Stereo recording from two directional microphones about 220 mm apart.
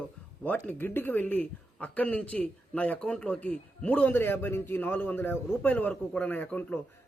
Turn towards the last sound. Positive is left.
turn(degrees=5)  # may be behind; listen again after turning